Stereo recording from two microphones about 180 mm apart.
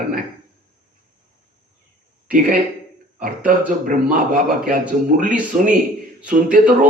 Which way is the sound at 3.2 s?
50° right (ahead or behind).